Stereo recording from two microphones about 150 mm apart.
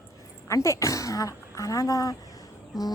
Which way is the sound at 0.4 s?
20° left (ahead or behind).